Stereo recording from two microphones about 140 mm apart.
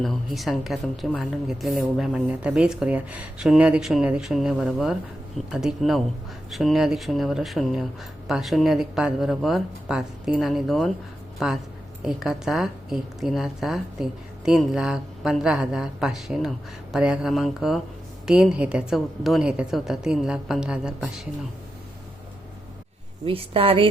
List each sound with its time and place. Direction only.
0.0 s a woman's voice: centre (ahead or behind)
23.2 s a woman's voice: 40° right (ahead or behind)